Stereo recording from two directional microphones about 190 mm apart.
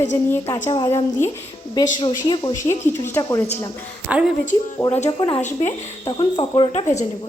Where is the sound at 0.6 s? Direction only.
30° left (ahead or behind).